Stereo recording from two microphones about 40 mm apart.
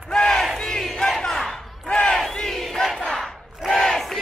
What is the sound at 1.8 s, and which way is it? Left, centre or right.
Crowd, left.